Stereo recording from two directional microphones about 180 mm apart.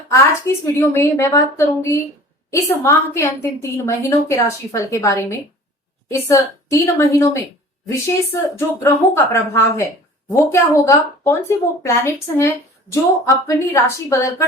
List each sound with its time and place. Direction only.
0.1 s a woman's voice: 15° left (ahead or behind)
8.5 s a woman's voice: 15° left (ahead or behind)